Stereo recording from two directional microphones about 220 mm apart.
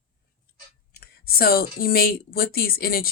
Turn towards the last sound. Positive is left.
turn(degrees=40)  # may be behind; listen again after turning